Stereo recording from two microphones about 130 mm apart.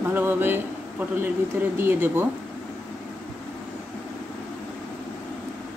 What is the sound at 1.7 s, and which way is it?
Speech, 15° right (ahead or behind).